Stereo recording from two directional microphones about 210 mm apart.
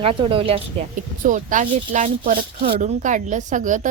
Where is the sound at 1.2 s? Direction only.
35° right (ahead or behind).